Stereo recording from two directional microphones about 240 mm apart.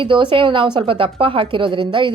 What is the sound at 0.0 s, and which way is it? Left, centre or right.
A woman's voice, right.